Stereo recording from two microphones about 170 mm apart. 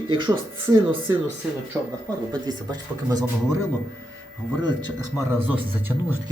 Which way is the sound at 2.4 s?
25° right (ahead or behind).